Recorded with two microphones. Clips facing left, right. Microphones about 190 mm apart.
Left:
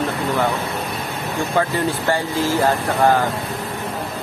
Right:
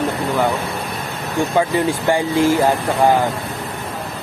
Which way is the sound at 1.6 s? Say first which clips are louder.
Right 2 dB; 15° right (ahead or behind).